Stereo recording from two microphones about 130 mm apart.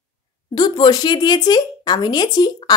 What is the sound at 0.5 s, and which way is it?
A woman's voice, 35° left (ahead or behind).